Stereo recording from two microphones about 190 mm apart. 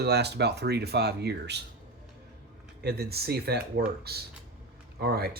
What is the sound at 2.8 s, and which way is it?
Speech, 55° right (ahead or behind).